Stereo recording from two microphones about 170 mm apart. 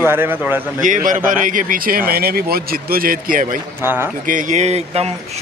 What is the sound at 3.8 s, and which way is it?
Speech, 15° right (ahead or behind).